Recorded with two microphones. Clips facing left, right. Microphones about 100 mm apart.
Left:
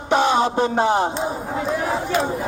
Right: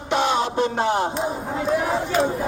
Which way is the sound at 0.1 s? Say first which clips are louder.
Left 4 dB; 40° left (ahead or behind).